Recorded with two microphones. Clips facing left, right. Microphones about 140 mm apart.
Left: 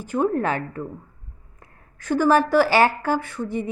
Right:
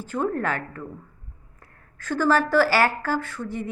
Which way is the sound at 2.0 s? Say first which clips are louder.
Left 3 dB; 15° left (ahead or behind).